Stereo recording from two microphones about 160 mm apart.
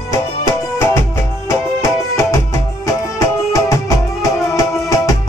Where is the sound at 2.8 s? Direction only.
20° left (ahead or behind).